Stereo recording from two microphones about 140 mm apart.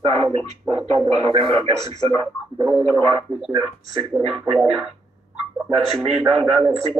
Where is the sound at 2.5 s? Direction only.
25° right (ahead or behind).